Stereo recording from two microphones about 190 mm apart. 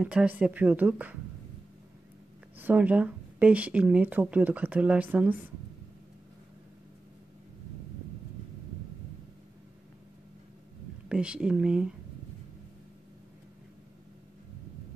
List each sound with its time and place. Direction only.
0.0 s speech: 5° right (ahead or behind)
2.5 s speech: 10° right (ahead or behind)
11.1 s speech: 5° right (ahead or behind)